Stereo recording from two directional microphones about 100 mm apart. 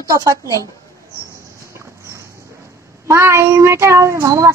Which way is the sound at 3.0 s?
30° right (ahead or behind).